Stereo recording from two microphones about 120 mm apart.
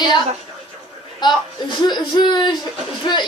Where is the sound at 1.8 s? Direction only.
35° left (ahead or behind).